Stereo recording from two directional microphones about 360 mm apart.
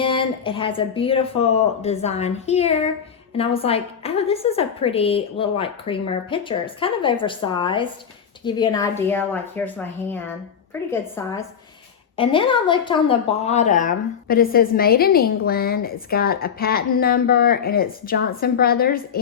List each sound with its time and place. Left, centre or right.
0.0 s a woman's voice: centre